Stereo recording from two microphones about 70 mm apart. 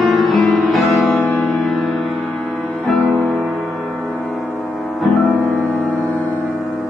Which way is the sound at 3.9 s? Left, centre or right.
Centre.